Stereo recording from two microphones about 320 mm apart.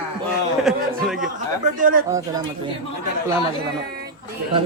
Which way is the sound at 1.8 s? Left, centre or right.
Right.